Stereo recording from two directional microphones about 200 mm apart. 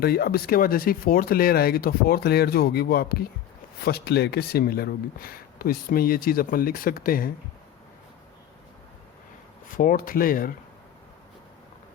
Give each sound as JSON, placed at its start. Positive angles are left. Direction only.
{"t": 0.0, "sound": "speech", "side_deg": 50}
{"t": 9.6, "sound": "speech", "side_deg": 45}